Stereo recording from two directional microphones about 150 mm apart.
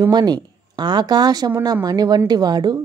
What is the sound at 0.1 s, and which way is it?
A woman's voice, 30° right (ahead or behind).